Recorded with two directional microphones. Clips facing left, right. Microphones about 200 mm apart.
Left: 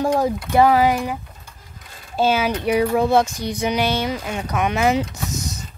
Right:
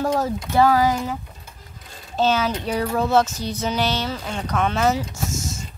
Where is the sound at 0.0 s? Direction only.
15° left (ahead or behind).